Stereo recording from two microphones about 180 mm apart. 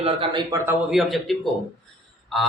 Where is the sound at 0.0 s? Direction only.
30° right (ahead or behind).